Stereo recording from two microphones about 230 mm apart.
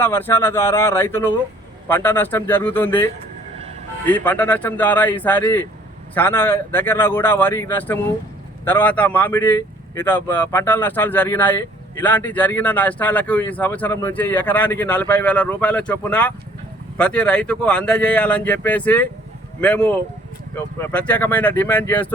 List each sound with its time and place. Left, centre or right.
0.0 s a man's voice: centre